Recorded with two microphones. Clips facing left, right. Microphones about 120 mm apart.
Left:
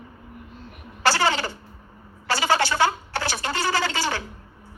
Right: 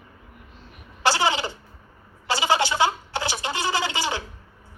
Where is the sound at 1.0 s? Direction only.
15° right (ahead or behind).